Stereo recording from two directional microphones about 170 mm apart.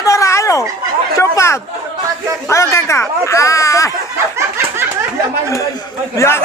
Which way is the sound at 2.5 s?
15° left (ahead or behind).